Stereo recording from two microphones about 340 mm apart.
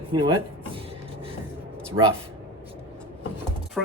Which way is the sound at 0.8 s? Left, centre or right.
Centre.